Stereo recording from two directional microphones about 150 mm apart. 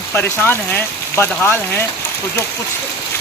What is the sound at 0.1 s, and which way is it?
Speech, 15° left (ahead or behind).